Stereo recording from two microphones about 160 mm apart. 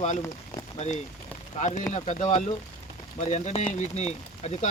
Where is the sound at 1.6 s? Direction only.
50° left (ahead or behind).